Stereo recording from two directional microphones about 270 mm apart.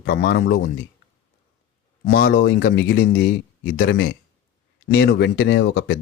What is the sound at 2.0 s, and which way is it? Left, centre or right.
Speech, left.